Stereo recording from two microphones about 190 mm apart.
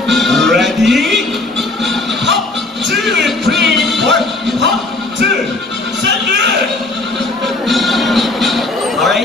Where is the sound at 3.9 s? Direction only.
65° right (ahead or behind).